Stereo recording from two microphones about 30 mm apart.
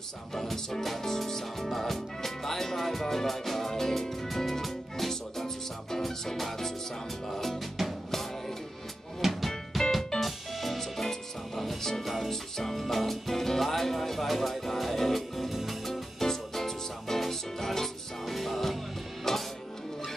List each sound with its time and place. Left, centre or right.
0.3 s music: centre
9.2 s music: centre
19.3 s music: centre